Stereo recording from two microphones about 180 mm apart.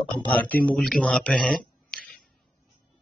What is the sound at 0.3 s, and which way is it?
Speech, 10° left (ahead or behind).